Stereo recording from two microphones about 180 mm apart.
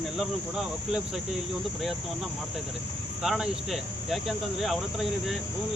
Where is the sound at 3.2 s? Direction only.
Centre (ahead or behind).